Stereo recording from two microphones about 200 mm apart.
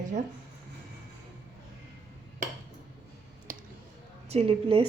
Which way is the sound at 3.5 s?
45° right (ahead or behind).